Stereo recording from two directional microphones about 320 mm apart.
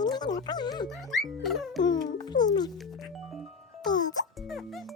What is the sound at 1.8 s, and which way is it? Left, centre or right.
Speech, centre.